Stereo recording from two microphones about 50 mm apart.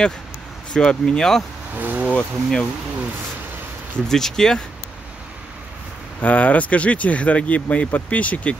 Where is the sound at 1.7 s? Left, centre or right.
Right.